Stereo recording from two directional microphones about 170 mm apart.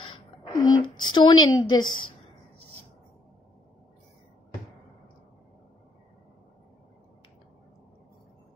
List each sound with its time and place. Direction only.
0.0 s a woman's voice: 25° left (ahead or behind)